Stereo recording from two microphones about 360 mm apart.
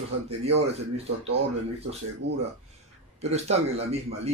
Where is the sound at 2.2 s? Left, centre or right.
Right.